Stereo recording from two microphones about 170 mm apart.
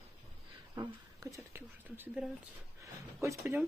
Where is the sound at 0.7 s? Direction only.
20° right (ahead or behind).